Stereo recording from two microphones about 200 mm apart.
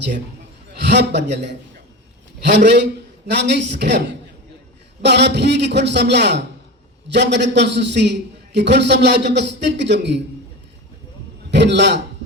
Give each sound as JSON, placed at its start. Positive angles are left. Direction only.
{"t": 0.8, "sound": "a man's voice", "side_deg": -60}
{"t": 5.0, "sound": "a man's voice", "side_deg": -60}
{"t": 11.5, "sound": "a man's voice", "side_deg": -60}